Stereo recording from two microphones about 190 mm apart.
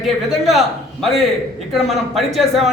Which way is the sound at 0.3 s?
Centre (ahead or behind).